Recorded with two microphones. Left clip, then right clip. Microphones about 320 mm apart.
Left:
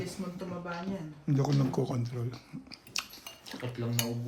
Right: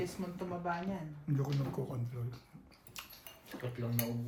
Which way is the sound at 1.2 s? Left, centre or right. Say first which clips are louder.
Left 9 dB; left.